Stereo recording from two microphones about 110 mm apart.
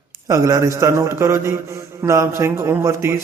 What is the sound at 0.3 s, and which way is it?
A man's voice, 30° right (ahead or behind).